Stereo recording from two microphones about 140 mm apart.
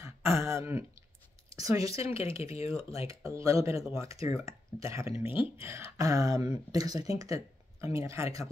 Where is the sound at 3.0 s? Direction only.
25° right (ahead or behind).